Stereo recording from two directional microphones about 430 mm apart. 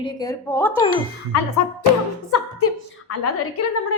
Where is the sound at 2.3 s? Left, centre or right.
Left.